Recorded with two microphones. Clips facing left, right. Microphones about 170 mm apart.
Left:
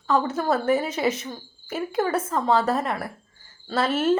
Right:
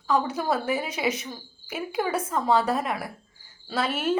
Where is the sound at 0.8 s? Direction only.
Centre (ahead or behind).